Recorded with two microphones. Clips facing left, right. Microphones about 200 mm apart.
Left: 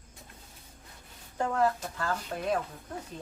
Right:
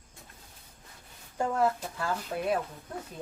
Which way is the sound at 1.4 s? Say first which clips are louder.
Even; 10° right (ahead or behind).